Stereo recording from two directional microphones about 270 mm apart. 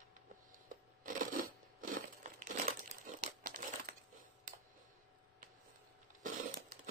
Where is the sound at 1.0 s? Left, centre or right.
Right.